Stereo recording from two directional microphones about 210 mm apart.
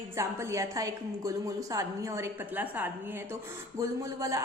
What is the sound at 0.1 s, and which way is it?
A woman's voice, 15° right (ahead or behind).